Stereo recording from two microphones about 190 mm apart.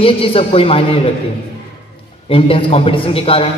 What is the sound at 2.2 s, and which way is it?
A man's voice, 30° left (ahead or behind).